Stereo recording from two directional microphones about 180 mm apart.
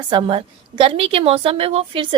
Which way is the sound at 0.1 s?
30° right (ahead or behind).